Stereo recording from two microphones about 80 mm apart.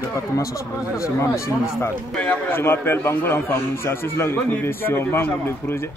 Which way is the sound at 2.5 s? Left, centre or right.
Left.